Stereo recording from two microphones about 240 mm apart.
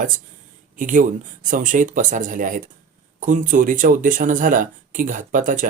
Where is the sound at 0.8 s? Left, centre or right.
Right.